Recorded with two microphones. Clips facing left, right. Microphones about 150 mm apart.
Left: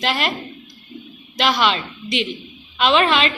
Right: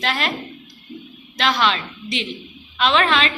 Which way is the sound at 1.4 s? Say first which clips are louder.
Left 1 dB; 5° left (ahead or behind).